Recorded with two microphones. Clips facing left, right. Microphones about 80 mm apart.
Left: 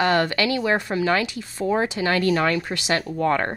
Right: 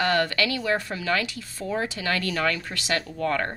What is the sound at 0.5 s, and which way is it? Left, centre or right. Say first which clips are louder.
Speech: left 4 dB; left.